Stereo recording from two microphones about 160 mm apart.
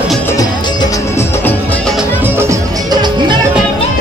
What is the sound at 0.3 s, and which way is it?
Music, 25° left (ahead or behind).